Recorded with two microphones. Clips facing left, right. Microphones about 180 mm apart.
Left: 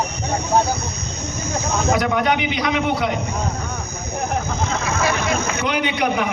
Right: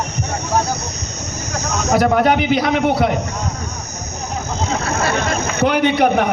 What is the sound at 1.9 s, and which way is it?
Speech, 40° right (ahead or behind).